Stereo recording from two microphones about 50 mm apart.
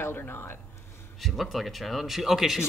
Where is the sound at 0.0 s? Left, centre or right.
Left.